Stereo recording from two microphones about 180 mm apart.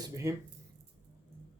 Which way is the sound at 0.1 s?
15° right (ahead or behind).